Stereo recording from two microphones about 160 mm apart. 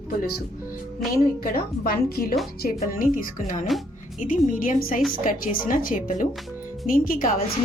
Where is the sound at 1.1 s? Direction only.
65° left (ahead or behind).